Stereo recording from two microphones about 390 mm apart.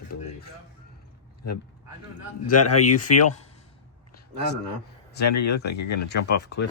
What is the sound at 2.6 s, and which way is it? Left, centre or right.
Speech, left.